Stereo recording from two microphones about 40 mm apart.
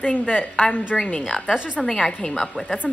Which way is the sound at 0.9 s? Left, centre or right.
Centre.